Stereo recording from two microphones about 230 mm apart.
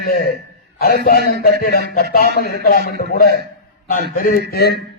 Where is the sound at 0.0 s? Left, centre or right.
Left.